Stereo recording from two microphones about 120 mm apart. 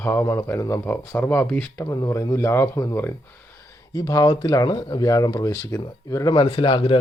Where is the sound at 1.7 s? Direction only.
30° left (ahead or behind).